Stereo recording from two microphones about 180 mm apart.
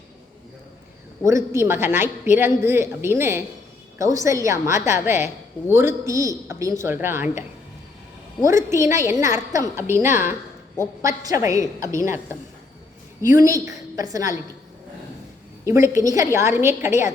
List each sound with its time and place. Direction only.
1.2 s a woman's voice: 15° right (ahead or behind)
8.4 s a woman's voice: 15° right (ahead or behind)
13.3 s a woman's voice: 15° right (ahead or behind)
15.6 s a woman's voice: 15° right (ahead or behind)